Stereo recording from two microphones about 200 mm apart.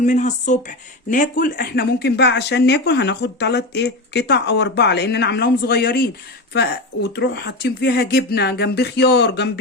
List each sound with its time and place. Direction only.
0.0 s speech: 35° left (ahead or behind); by 9.5 s 55° left (ahead or behind)